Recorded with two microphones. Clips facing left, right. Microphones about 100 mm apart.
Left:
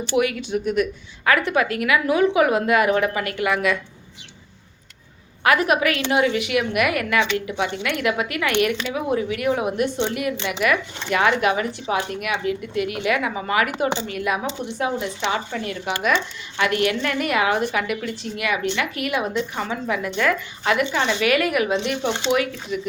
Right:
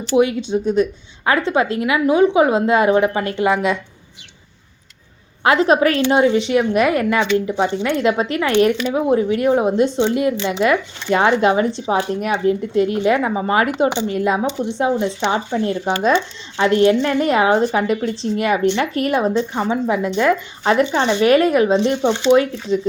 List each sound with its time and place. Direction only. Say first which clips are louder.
0.2 s a woman's voice: right 6 dB; 25° right (ahead or behind)
5.4 s a woman's voice: right 5 dB; 25° right (ahead or behind)